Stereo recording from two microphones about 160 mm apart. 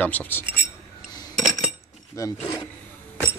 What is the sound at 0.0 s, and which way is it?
Speech, 10° left (ahead or behind).